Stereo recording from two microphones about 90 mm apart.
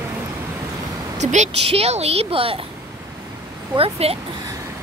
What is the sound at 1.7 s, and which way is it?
Speech, 90° right.